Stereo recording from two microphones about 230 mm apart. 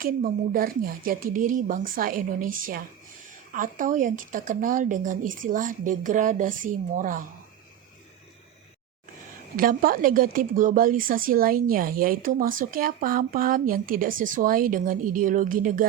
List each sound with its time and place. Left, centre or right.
0.0 s speech: right
9.6 s speech: right